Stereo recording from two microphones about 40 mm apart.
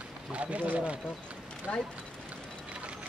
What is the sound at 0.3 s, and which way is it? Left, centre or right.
Speech, right.